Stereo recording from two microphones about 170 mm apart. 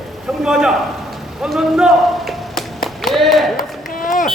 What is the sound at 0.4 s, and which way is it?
A man's voice, 5° right (ahead or behind).